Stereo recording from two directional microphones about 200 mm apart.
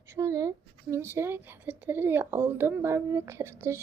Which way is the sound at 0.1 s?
15° right (ahead or behind).